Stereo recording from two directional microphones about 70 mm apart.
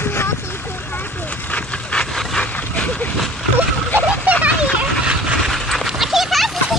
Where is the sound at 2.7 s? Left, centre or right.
Centre.